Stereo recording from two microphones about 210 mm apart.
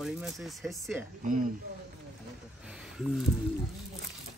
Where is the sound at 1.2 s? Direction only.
40° right (ahead or behind).